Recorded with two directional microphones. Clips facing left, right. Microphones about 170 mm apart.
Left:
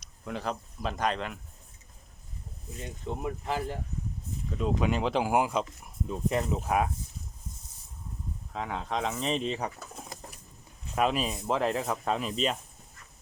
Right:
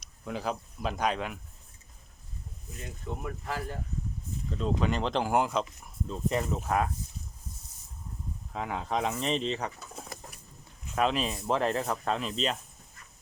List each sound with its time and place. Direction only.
0.3 s speech: centre (ahead or behind)
2.8 s speech: 20° left (ahead or behind)
4.5 s speech: 10° left (ahead or behind)
8.5 s speech: centre (ahead or behind)